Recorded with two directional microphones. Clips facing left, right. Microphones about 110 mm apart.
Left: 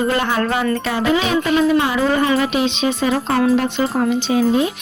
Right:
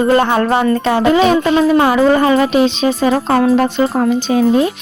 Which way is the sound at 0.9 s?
50° right (ahead or behind).